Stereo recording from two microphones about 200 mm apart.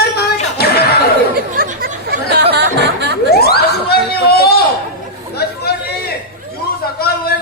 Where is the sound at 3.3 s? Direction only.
50° left (ahead or behind).